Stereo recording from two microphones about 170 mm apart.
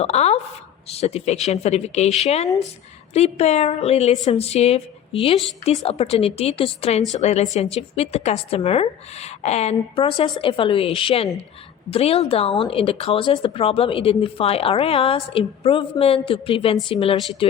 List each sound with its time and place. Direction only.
0.0 s speech: 40° left (ahead or behind)